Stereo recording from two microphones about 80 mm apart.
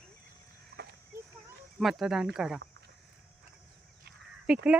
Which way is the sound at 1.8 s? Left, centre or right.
Centre.